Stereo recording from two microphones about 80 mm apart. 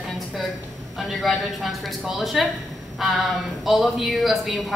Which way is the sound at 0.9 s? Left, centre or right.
Centre.